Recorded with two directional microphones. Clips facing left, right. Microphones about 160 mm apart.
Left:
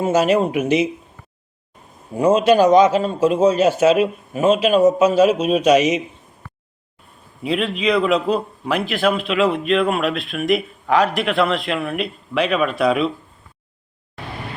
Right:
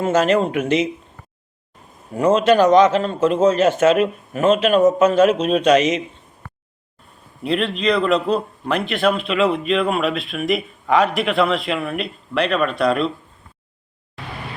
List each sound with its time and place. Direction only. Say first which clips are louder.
0.0 s a man's voice: even; 10° left (ahead or behind)
2.1 s a man's voice: left 1 dB; 15° left (ahead or behind)
7.4 s a man's voice: even; 5° left (ahead or behind)